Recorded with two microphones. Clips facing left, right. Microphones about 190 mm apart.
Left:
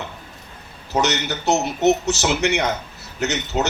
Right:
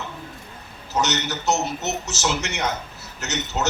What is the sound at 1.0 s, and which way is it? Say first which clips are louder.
A man's voice: left 1 dB; 60° left (ahead or behind).